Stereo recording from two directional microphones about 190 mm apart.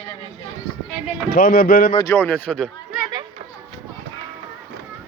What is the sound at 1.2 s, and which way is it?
Speech, 55° left (ahead or behind).